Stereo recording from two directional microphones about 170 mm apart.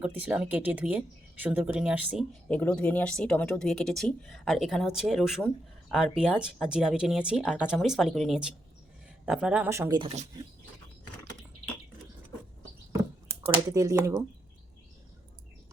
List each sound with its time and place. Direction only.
0.0 s speech: 10° right (ahead or behind)
10.0 s speech: 35° right (ahead or behind)
13.7 s speech: 20° right (ahead or behind)